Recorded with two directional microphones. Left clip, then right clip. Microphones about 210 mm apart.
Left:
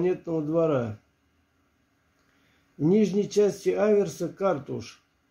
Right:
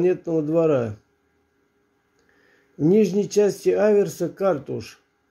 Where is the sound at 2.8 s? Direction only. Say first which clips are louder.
Right 5 dB; 20° right (ahead or behind).